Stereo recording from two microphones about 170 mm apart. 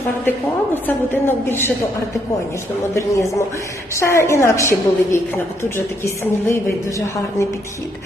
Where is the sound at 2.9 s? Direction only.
20° left (ahead or behind).